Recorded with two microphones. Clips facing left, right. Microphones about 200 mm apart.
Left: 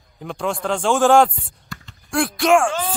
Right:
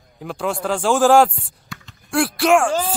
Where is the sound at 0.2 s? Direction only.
5° right (ahead or behind).